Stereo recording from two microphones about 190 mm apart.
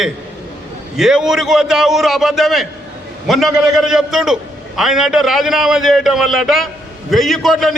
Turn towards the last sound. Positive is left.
turn(degrees=0)  # may be behind; listen again after turning